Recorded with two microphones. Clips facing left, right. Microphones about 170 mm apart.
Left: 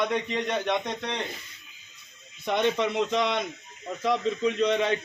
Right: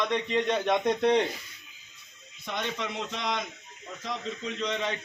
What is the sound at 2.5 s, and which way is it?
A man's voice, 65° left (ahead or behind).